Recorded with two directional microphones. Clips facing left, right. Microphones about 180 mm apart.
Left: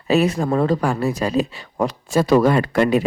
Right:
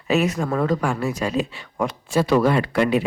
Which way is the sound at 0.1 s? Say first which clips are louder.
Left 3 dB; 30° left (ahead or behind).